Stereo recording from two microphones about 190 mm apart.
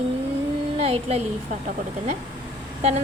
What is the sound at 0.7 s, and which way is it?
Speech, 30° right (ahead or behind).